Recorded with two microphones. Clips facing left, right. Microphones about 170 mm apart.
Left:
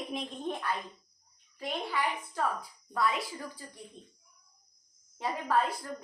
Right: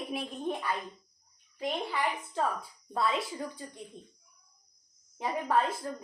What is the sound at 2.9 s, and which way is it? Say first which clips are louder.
Speech: right 1 dB; 25° right (ahead or behind).